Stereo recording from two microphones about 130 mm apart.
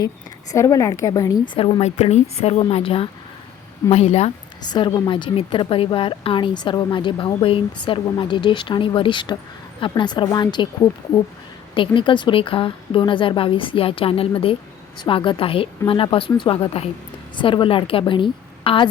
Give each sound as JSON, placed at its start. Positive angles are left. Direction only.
{"t": 0.5, "sound": "a woman's voice", "side_deg": 25}
{"t": 1.5, "sound": "a woman's voice", "side_deg": 40}
{"t": 1.8, "sound": "a woman's voice", "side_deg": 60}
{"t": 4.6, "sound": "a woman's voice", "side_deg": 35}
{"t": 11.7, "sound": "a woman's voice", "side_deg": 40}